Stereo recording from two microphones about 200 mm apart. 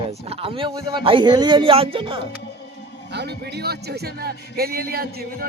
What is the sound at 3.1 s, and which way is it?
Speech, 55° right (ahead or behind).